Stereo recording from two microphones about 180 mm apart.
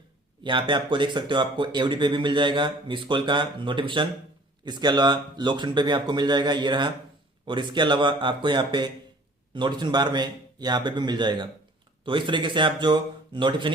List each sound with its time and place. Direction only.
0.4 s speech: 25° right (ahead or behind)